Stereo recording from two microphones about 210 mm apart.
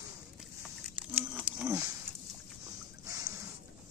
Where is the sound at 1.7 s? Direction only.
15° right (ahead or behind).